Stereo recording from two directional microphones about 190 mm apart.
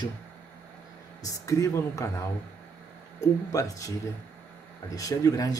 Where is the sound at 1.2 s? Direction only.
15° left (ahead or behind).